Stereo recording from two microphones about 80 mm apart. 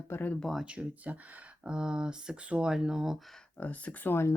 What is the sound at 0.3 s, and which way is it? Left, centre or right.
Speech, centre.